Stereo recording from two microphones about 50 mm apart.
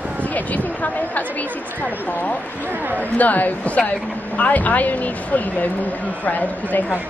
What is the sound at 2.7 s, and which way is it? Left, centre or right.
Speech, right.